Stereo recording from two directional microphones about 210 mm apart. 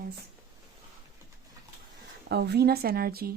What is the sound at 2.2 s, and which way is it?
Speech, 50° right (ahead or behind).